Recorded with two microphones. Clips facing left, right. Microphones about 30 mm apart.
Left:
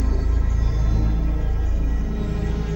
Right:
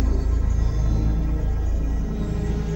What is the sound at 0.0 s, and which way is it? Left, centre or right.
Music, centre.